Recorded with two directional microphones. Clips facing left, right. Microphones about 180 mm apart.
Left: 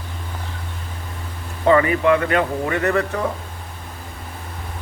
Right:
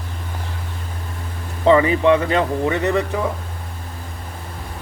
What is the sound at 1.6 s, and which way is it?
Speech, 25° right (ahead or behind).